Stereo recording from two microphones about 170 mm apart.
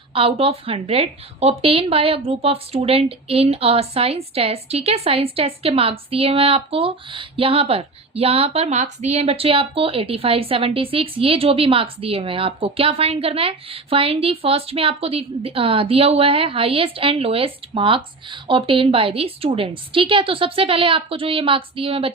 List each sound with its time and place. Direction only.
0.1 s a woman's voice: 30° right (ahead or behind)